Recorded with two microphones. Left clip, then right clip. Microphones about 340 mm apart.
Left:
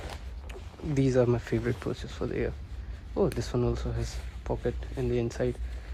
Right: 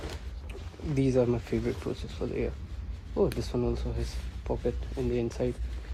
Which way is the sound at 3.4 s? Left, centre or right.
Left.